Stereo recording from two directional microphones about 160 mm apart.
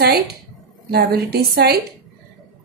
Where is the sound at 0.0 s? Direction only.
80° right.